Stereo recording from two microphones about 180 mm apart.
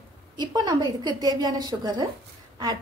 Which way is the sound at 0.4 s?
25° right (ahead or behind).